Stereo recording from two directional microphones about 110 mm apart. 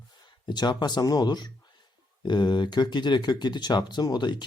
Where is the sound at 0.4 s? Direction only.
40° left (ahead or behind).